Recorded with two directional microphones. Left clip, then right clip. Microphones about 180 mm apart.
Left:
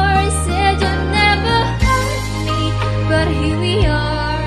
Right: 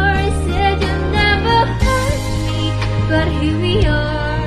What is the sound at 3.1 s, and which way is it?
Music, 25° left (ahead or behind).